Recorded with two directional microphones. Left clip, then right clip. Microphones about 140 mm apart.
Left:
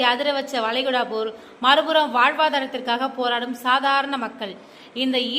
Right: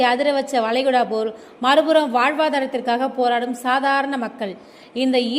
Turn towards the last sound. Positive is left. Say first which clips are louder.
# right 3 dB
turn(degrees=-35)  # may be behind; listen again after turning